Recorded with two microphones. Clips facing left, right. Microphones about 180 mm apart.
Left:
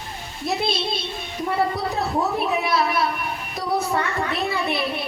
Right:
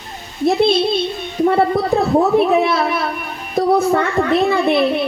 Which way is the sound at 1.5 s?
55° right (ahead or behind).